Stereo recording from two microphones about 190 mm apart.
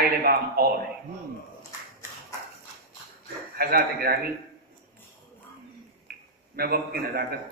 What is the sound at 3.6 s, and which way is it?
Speech, 50° right (ahead or behind).